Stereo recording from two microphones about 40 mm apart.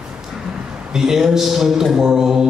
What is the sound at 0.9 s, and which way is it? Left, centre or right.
Speech, centre.